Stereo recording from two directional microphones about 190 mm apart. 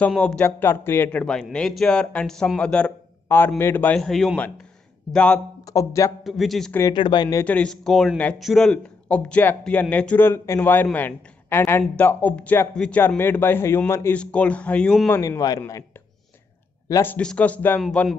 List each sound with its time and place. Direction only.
0.0 s a man's voice: 5° left (ahead or behind)
5.7 s speech: 15° left (ahead or behind)
6.2 s a man's voice: centre (ahead or behind)
6.8 s speech: 20° left (ahead or behind)
7.4 s speech: 5° left (ahead or behind)
15.1 s speech: 15° left (ahead or behind)
16.9 s a man's voice: 10° left (ahead or behind)